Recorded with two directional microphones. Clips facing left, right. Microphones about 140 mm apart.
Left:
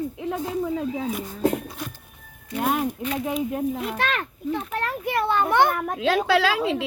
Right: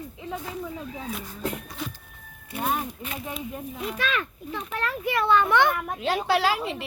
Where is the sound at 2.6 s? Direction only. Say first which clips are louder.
Left 5 dB; 80° left; by 5.9 s 45° left (ahead or behind).